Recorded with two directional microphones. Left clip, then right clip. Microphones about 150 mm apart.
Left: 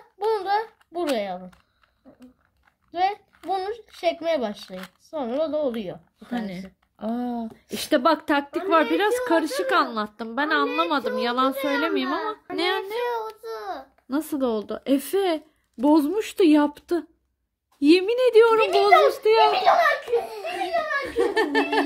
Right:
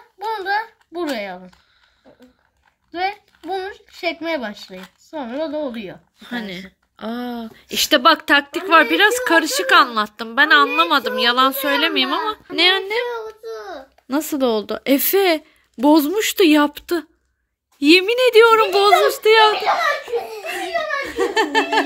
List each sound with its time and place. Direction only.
0.2 s a sound: 25° left (ahead or behind)
2.9 s a child's voice: 30° left (ahead or behind)
6.2 s a woman's voice: centre (ahead or behind)
12.5 s speech: 20° right (ahead or behind)
13.2 s child singing: 15° left (ahead or behind)
14.0 s a woman's voice: 20° right (ahead or behind)
20.4 s belly laugh: 20° right (ahead or behind)